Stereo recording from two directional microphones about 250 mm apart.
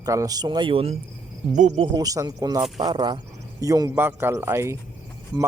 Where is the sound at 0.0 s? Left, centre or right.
Centre.